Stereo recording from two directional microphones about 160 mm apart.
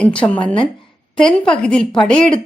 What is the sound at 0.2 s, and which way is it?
Speech, 20° left (ahead or behind).